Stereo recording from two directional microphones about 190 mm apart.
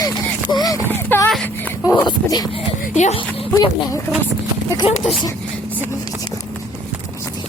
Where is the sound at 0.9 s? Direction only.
10° left (ahead or behind).